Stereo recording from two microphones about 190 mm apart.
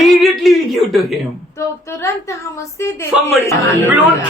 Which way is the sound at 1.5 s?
15° left (ahead or behind).